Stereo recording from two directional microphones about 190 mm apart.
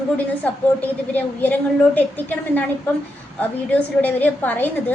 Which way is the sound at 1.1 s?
10° left (ahead or behind).